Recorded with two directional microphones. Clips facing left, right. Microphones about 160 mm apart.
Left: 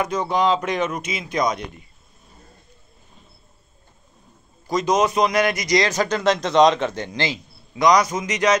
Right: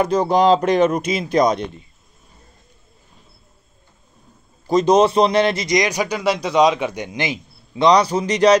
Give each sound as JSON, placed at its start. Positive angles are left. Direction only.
{"t": 0.0, "sound": "speech", "side_deg": -35}
{"t": 4.6, "sound": "a man's voice", "side_deg": -30}